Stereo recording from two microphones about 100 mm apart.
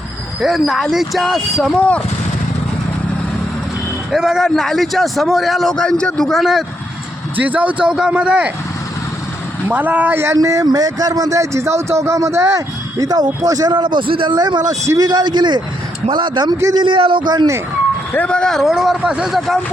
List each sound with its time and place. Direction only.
0.3 s a man's voice: centre (ahead or behind)
4.1 s a man's voice: centre (ahead or behind)
7.3 s a man's voice: 15° right (ahead or behind)
9.6 s a man's voice: 15° right (ahead or behind)
10.3 s a man's voice: 35° right (ahead or behind)
13.7 s a man's voice: 50° right (ahead or behind)
18.1 s speech: 10° left (ahead or behind)
18.7 s a man's voice: 5° right (ahead or behind)